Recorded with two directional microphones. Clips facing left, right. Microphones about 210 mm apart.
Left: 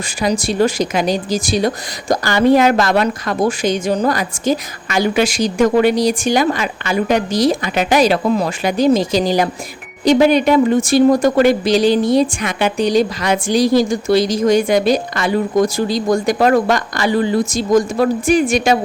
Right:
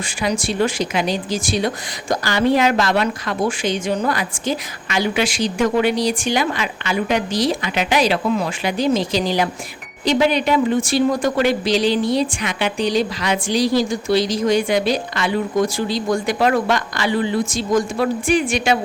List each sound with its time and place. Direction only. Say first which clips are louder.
0.2 s speech: left 4 dB; 40° left (ahead or behind)